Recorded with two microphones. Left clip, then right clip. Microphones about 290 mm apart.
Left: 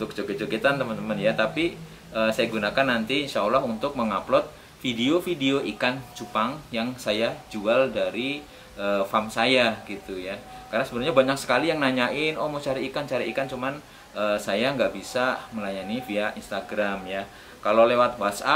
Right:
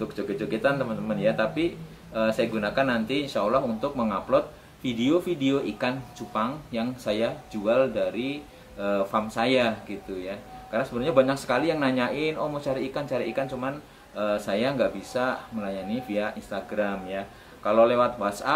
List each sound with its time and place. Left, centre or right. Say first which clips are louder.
0.0 s speech: left 1 dB; centre
12.4 s speech: left 1 dB; centre
12.6 s speech: left 1 dB; centre